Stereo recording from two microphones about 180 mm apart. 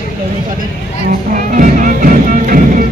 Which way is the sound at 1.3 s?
45° right (ahead or behind).